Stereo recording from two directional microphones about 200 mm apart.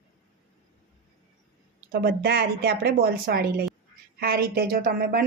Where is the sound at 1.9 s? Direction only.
50° right (ahead or behind).